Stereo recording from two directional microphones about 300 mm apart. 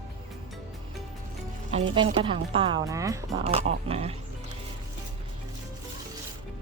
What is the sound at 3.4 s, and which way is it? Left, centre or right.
Speech, right.